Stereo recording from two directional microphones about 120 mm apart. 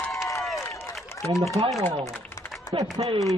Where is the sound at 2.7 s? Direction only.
40° right (ahead or behind).